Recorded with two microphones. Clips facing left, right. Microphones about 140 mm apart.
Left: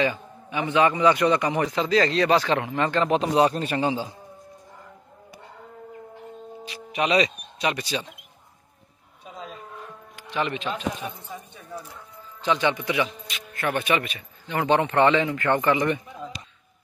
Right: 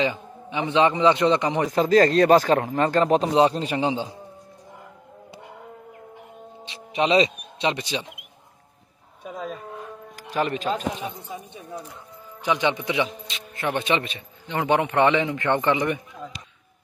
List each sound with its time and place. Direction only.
0.0 s a man's voice: 20° right (ahead or behind)
1.7 s speech: 45° right (ahead or behind)
3.3 s a man's voice: 20° right (ahead or behind)
6.6 s a man's voice: 25° right (ahead or behind)
9.2 s a sound: 50° right (ahead or behind)
10.1 s speech: 40° right (ahead or behind)
11.0 s a man's voice: 15° right (ahead or behind)